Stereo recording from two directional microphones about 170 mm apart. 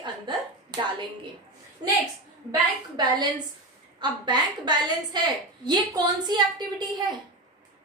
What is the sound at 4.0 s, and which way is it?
A woman's voice, 25° right (ahead or behind).